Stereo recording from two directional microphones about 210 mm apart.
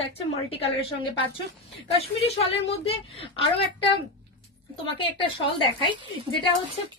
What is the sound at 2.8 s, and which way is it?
A woman's voice, 25° left (ahead or behind).